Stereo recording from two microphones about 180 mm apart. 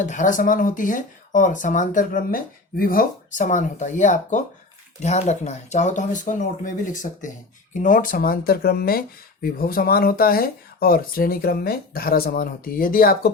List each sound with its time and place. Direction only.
0.0 s speech: 45° left (ahead or behind)